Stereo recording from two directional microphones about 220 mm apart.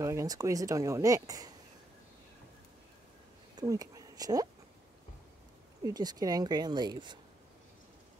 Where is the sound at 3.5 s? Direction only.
15° right (ahead or behind).